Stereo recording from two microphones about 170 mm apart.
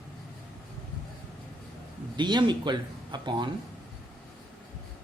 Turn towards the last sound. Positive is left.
turn(degrees=-25)  # may be behind; listen again after turning